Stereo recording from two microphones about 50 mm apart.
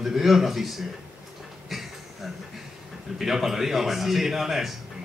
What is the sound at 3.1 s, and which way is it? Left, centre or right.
A man's voice, centre.